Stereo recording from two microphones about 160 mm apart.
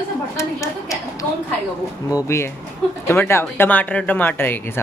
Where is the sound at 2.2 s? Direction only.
15° left (ahead or behind).